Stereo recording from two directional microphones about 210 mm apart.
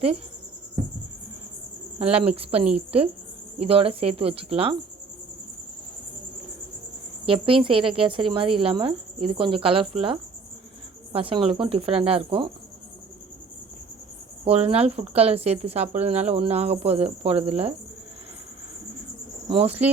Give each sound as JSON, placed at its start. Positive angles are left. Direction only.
{"t": 2.0, "sound": "speech", "side_deg": -30}
{"t": 7.3, "sound": "speech", "side_deg": -25}
{"t": 14.4, "sound": "speech", "side_deg": -30}
{"t": 19.5, "sound": "speech", "side_deg": -25}